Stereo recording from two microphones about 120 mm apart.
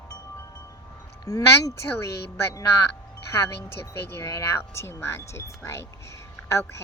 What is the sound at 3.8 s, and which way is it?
Speech, 20° left (ahead or behind).